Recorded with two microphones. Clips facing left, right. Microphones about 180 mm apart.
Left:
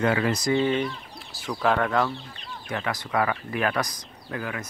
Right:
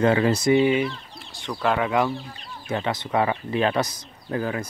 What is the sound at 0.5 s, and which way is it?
Speech, 10° right (ahead or behind).